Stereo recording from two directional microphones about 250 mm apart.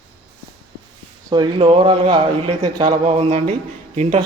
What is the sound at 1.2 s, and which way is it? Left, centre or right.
Speech, centre.